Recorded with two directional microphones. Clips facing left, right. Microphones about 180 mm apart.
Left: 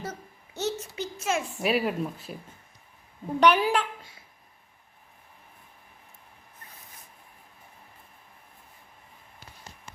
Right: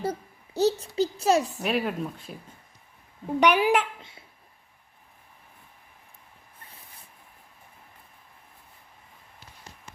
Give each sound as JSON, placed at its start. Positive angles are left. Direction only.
{"t": 0.0, "sound": "a child's voice", "side_deg": -35}
{"t": 1.5, "sound": "speech", "side_deg": 0}
{"t": 3.4, "sound": "a woman's voice", "side_deg": -10}